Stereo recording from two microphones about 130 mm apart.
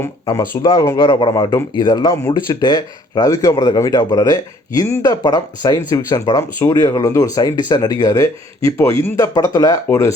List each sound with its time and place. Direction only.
0.0 s speech: 20° left (ahead or behind)
0.9 s speech: 40° left (ahead or behind)